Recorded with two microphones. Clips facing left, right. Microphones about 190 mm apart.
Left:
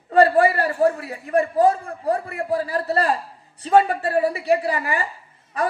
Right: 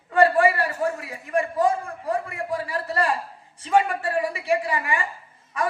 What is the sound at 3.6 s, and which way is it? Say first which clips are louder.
A woman's voice: left 4 dB; 35° left (ahead or behind).